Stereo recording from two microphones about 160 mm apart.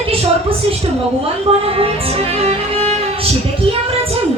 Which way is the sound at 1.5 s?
35° right (ahead or behind).